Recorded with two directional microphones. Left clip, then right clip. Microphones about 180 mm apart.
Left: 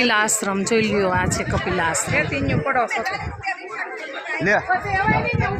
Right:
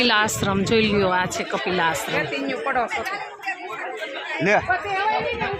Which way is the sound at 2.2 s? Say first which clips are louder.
Left 3 dB; 65° left (ahead or behind).